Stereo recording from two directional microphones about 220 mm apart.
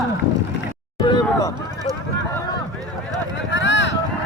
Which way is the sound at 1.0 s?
20° left (ahead or behind).